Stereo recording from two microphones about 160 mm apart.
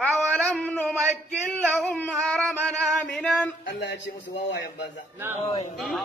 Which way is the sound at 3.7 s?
90° left.